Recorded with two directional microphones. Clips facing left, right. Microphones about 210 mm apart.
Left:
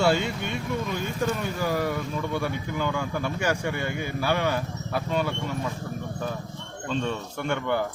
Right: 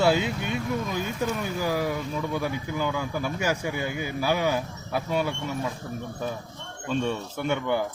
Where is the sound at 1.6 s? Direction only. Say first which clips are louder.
Even; 10° right (ahead or behind).